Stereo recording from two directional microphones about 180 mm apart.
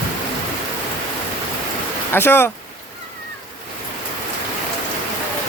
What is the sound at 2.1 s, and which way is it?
Speech, 10° left (ahead or behind).